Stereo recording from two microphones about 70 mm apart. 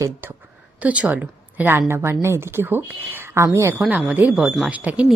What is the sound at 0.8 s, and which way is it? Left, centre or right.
Speech, centre.